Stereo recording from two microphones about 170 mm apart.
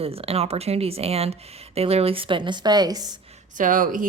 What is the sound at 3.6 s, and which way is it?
Speech, 50° right (ahead or behind).